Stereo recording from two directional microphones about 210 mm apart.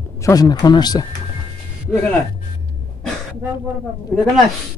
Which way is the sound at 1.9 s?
5° left (ahead or behind).